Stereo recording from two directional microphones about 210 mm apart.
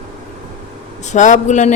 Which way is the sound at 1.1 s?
35° left (ahead or behind).